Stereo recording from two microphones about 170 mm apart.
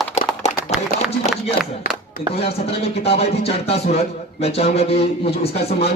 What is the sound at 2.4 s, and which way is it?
A man's voice, 35° left (ahead or behind).